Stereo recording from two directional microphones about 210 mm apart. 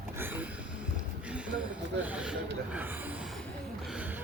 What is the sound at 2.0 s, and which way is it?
Gasp, 5° right (ahead or behind).